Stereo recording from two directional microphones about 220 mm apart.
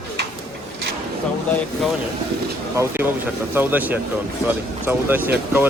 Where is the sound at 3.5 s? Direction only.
10° right (ahead or behind).